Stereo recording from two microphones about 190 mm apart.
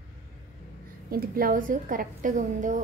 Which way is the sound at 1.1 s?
50° right (ahead or behind).